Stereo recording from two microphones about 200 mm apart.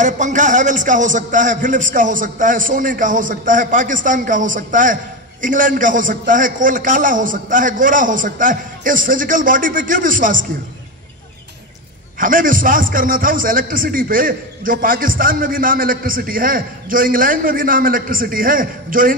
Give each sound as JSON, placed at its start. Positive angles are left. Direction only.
{"t": 0.0, "sound": "a man's voice", "side_deg": -40}
{"t": 12.2, "sound": "a man's voice", "side_deg": -40}